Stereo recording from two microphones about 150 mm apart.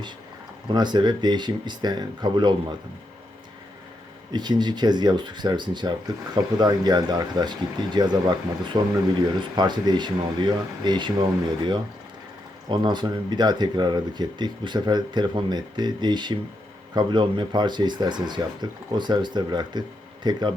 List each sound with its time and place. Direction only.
0.7 s speech: 30° right (ahead or behind)
4.3 s speech: 30° right (ahead or behind)